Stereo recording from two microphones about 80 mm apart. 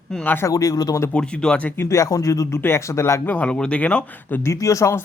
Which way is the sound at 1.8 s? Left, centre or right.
Left.